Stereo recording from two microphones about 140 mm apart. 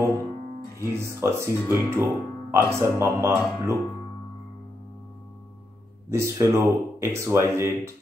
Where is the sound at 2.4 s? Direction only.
20° right (ahead or behind).